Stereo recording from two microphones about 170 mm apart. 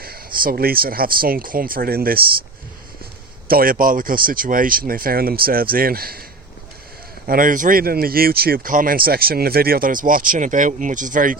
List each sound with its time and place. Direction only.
0.0 s speech: 60° right (ahead or behind)
3.5 s speech: 55° right (ahead or behind)
7.3 s speech: 55° right (ahead or behind)